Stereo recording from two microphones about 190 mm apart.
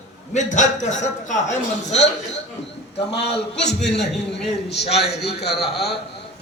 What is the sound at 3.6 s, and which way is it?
A man's voice, 60° left (ahead or behind).